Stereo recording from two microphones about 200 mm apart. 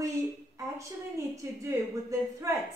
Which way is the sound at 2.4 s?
15° right (ahead or behind).